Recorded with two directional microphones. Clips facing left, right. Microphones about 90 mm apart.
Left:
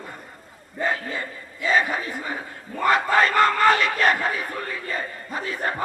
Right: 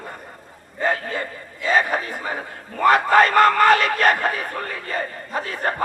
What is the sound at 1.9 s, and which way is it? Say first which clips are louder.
Battle cry: right 4 dB; 45° right (ahead or behind).